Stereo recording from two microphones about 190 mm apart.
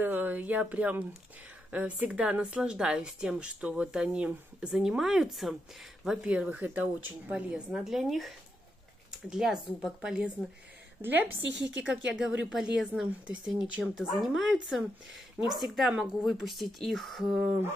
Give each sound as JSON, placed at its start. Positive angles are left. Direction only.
{"t": 0.0, "sound": "a woman's voice", "side_deg": -10}
{"t": 11.3, "sound": "a woman's voice", "side_deg": -65}
{"t": 12.4, "sound": "a woman's voice", "side_deg": 0}